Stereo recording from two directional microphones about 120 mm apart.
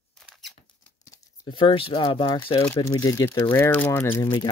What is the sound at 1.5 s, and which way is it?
Speech, 45° left (ahead or behind).